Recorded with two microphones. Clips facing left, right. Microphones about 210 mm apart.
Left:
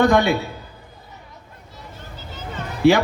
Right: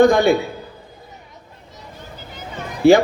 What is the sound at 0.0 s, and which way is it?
Speech, 50° right (ahead or behind).